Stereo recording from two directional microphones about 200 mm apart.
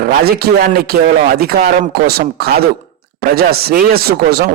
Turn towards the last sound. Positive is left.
turn(degrees=-50)  # may be behind; listen again after turning